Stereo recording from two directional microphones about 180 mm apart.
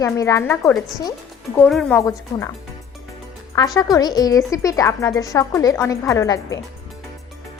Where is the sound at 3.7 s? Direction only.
20° left (ahead or behind).